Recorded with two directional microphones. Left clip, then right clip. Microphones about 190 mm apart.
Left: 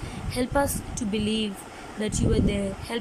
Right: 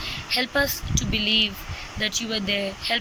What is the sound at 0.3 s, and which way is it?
Speech, 20° left (ahead or behind).